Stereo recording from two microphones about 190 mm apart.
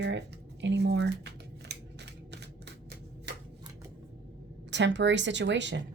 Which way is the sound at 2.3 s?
60° right (ahead or behind).